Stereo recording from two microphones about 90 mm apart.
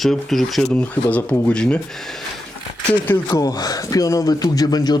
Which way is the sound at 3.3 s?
45° left (ahead or behind).